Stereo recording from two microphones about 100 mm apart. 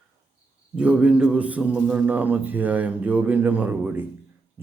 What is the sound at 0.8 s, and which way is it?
A man's voice, 10° right (ahead or behind).